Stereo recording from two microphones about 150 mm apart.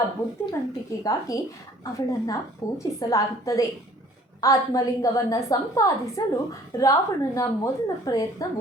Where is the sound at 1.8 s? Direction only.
20° left (ahead or behind).